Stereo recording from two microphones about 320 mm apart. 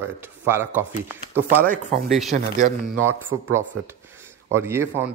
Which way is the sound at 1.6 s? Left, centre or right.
Right.